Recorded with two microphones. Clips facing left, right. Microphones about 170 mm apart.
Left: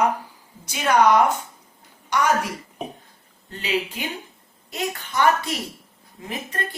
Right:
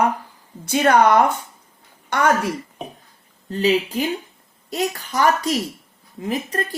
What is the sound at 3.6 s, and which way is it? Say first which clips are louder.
Speech: right 7 dB; 35° right (ahead or behind).